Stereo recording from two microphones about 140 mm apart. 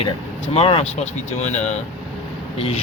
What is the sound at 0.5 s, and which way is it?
Speech, 45° left (ahead or behind).